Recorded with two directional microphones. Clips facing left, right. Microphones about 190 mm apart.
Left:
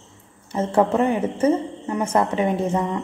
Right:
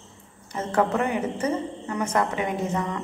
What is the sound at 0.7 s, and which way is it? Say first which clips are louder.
A woman's voice: left 4 dB; 30° left (ahead or behind).